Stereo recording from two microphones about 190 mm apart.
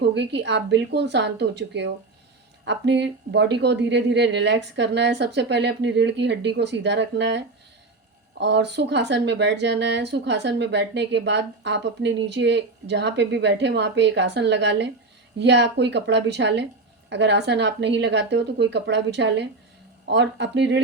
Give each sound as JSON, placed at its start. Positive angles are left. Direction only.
{"t": 0.0, "sound": "speech", "side_deg": -65}